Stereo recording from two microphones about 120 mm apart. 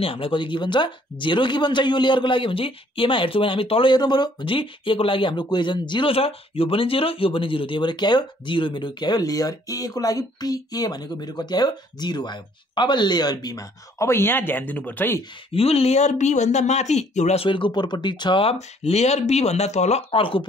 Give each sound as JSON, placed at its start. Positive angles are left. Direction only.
{"t": 0.0, "sound": "speech", "side_deg": 50}
{"t": 15.5, "sound": "speech", "side_deg": 55}
{"t": 17.4, "sound": "speech", "side_deg": 45}
{"t": 20.1, "sound": "speech", "side_deg": 50}